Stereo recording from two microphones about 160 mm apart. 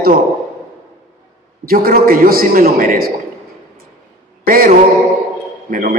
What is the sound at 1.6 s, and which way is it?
A man's voice, 65° right (ahead or behind).